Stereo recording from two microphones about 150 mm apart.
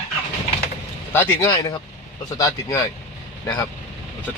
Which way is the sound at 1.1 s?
15° left (ahead or behind).